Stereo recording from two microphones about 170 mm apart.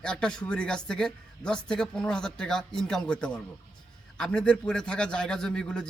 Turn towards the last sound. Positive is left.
turn(degrees=5)  # may be behind; listen again after turning